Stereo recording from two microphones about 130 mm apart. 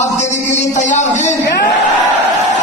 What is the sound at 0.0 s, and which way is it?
Music, 65° left (ahead or behind).